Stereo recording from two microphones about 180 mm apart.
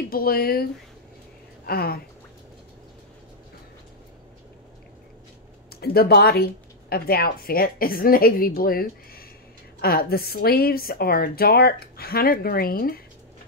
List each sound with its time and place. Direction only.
0.1 s a woman's voice: 55° left (ahead or behind)
1.7 s a woman's voice: 55° left (ahead or behind)
5.7 s a woman's voice: 60° left (ahead or behind)